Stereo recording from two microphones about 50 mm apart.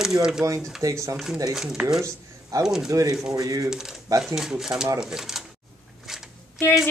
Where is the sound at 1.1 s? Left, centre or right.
Centre.